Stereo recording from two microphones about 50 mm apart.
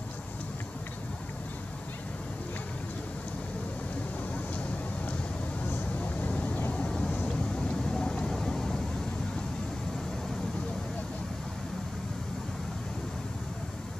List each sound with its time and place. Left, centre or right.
5.9 s vehicle: left
6.7 s vehicle: centre